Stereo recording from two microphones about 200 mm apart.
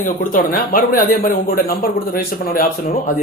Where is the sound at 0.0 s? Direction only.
45° left (ahead or behind).